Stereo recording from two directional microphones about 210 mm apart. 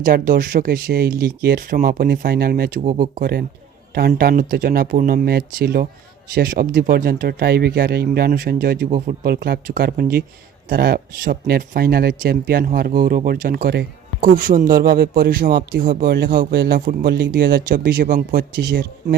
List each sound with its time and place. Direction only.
0.0 s speech: 40° right (ahead or behind)